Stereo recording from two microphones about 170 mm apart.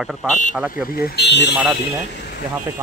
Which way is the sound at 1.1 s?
80° left.